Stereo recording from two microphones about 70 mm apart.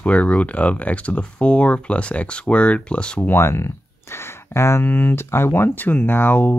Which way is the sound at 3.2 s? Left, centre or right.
Left.